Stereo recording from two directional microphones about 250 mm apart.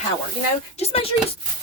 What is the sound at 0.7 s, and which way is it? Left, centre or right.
Speech, left.